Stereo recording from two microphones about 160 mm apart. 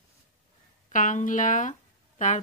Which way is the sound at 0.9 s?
55° left (ahead or behind).